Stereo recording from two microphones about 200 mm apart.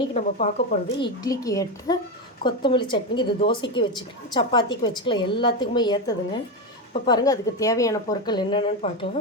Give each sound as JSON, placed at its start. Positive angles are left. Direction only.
{"t": 0.0, "sound": "speech", "side_deg": 35}
{"t": 0.9, "sound": "a woman's voice", "side_deg": 20}